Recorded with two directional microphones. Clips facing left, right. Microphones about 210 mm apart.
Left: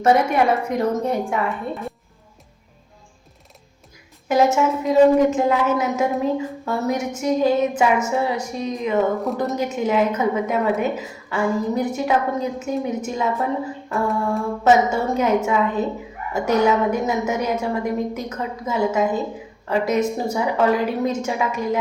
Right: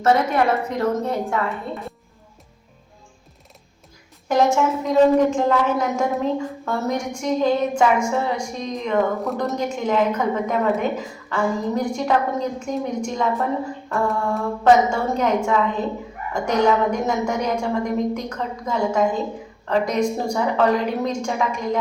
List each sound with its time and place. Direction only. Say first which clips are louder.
0.0 s a woman's voice: left 1 dB; 15° left (ahead or behind)
4.3 s a woman's voice: left 1 dB; 5° left (ahead or behind)